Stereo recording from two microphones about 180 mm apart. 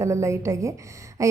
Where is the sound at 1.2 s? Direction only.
15° right (ahead or behind).